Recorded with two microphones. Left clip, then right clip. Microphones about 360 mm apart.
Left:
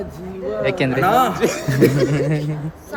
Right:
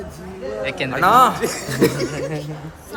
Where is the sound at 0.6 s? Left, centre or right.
Centre.